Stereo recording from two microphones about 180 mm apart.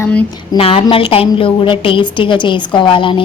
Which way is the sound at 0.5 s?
30° left (ahead or behind).